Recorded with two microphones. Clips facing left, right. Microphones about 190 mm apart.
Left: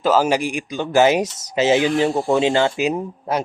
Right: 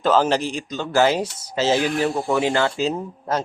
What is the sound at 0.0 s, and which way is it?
Speech, 10° left (ahead or behind).